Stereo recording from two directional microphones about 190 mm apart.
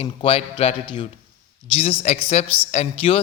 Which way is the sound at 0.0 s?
30° left (ahead or behind).